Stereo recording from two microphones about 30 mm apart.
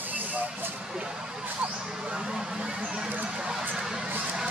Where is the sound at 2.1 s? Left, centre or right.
Right.